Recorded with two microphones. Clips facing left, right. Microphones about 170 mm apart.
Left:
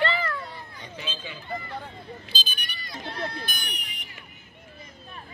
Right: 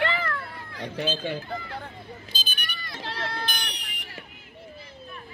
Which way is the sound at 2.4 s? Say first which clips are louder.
Right 1 dB; 60° right (ahead or behind).